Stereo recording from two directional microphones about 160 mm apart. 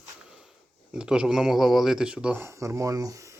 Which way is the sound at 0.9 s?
5° right (ahead or behind).